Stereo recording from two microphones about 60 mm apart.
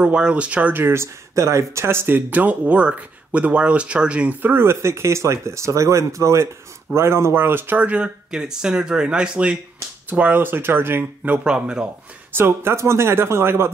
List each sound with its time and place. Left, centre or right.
0.0 s speech: centre
0.7 s speech: right; by 9.6 s centre
10.0 s speech: right
11.2 s speech: centre
12.3 s speech: right